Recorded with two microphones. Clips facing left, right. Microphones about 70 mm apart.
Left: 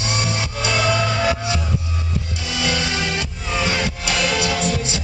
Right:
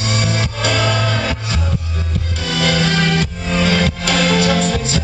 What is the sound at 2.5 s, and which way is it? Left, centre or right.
Music, right.